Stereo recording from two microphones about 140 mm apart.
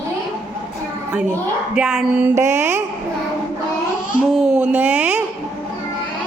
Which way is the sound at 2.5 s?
55° right (ahead or behind).